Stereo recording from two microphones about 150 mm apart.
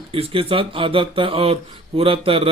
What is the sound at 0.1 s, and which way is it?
A man's voice, 40° right (ahead or behind).